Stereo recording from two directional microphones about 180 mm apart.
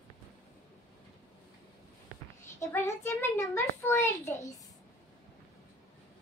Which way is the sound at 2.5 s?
15° left (ahead or behind).